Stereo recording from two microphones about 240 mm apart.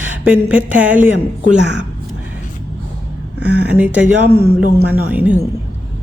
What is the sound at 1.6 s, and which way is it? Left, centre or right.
Speech, right.